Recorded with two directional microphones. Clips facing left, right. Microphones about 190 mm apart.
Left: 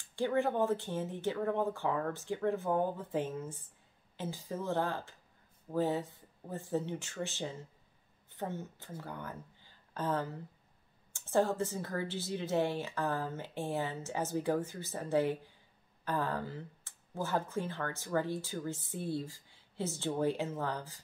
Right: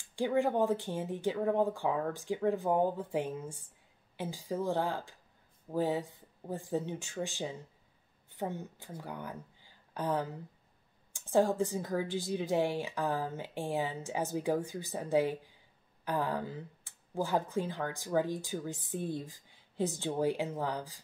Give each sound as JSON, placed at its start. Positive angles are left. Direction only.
{"t": 0.1, "sound": "a woman's voice", "side_deg": -15}